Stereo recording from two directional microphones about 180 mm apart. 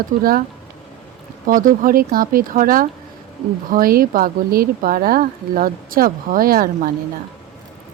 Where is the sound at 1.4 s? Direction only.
50° right (ahead or behind).